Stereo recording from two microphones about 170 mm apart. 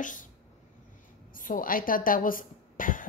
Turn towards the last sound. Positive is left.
turn(degrees=55)  # may be behind; listen again after turning